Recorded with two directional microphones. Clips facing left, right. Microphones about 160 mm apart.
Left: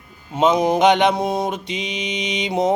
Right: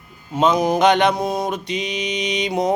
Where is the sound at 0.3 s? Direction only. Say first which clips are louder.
Left 1 dB; 25° left (ahead or behind).